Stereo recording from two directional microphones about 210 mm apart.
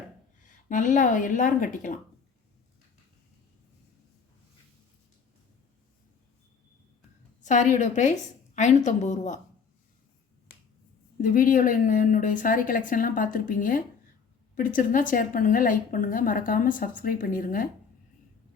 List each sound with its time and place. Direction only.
0.4 s a woman's voice: 40° left (ahead or behind)
7.4 s a woman's voice: 35° left (ahead or behind)
11.2 s a woman's voice: 40° left (ahead or behind)